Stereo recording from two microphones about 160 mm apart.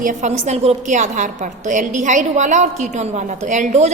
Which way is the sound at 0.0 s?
50° right (ahead or behind).